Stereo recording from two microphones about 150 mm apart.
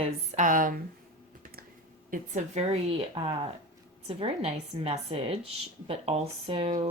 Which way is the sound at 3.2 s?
30° right (ahead or behind).